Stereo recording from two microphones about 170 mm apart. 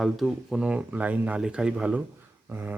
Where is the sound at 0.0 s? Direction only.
Centre (ahead or behind).